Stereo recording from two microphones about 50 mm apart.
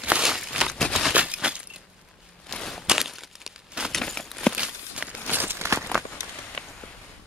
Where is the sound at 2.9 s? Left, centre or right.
Centre.